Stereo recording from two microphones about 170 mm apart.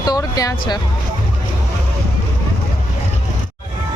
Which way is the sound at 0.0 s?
20° left (ahead or behind).